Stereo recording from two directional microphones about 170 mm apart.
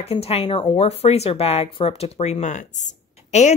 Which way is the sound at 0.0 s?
35° left (ahead or behind).